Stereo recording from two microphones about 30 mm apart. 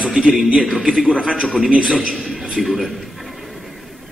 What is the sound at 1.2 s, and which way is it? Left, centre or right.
Speech, right.